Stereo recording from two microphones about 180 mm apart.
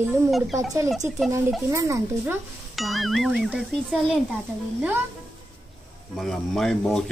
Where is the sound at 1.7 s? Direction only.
15° right (ahead or behind).